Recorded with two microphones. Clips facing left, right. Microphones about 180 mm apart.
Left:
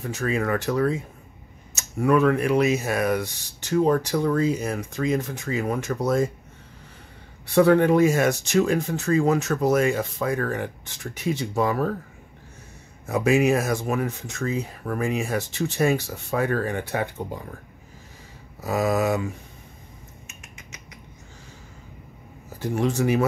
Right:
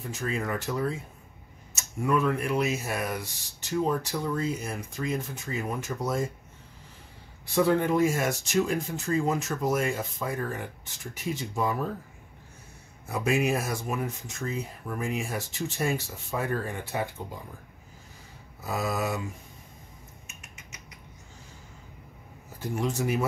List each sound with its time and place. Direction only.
0.0 s speech: 70° left (ahead or behind)
7.4 s speech: 65° left (ahead or behind)
13.0 s speech: 75° left (ahead or behind)
18.7 s speech: 75° left (ahead or behind)
22.6 s speech: 75° left (ahead or behind)